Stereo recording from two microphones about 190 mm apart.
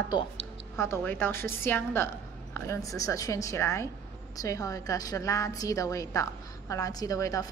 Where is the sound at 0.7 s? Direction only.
15° left (ahead or behind).